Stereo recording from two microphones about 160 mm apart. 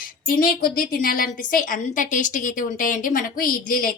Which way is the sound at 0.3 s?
65° left (ahead or behind).